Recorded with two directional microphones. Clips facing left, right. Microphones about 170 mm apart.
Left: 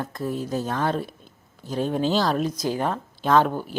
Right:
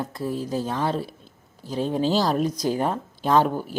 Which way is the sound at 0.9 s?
30° right (ahead or behind).